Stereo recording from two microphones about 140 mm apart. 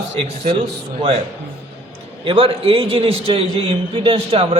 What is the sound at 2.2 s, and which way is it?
A man's voice, 40° right (ahead or behind).